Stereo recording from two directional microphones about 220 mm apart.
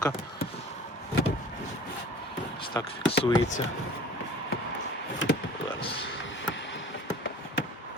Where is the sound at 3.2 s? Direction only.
35° left (ahead or behind).